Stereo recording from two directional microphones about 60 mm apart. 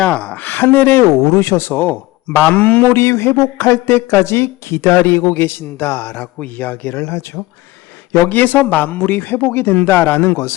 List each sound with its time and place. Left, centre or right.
0.0 s speech: centre
0.3 s speech: left
1.2 s speech: left
2.9 s speech: left
8.3 s speech: left